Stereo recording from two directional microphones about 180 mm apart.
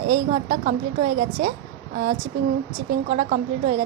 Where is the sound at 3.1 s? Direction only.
45° right (ahead or behind).